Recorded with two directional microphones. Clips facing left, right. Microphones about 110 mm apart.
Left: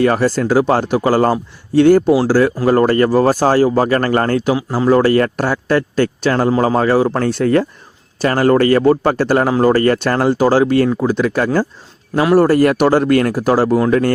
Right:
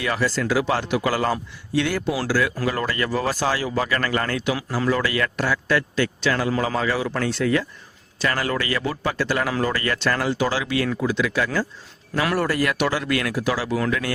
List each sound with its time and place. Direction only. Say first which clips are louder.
0.0 s speech: left 10 dB; 45° left (ahead or behind)
13.7 s speech: left 10 dB; 30° left (ahead or behind)